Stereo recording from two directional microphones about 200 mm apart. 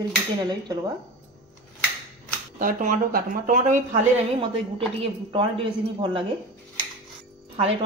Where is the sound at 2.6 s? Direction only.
40° right (ahead or behind).